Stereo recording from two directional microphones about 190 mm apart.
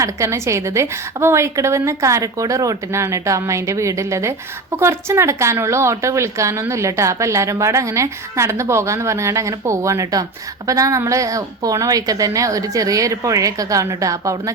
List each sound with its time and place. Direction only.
0.0 s speech: 15° right (ahead or behind)